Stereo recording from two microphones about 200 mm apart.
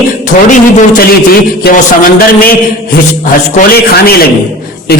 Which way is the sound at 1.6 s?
50° left (ahead or behind).